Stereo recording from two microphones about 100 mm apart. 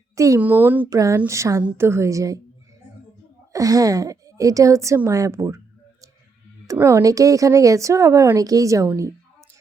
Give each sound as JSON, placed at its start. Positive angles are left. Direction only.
{"t": 0.3, "sound": "speech", "side_deg": -20}
{"t": 0.9, "sound": "speech", "side_deg": -30}
{"t": 3.5, "sound": "a woman's voice", "side_deg": -35}
{"t": 6.7, "sound": "speech", "side_deg": -25}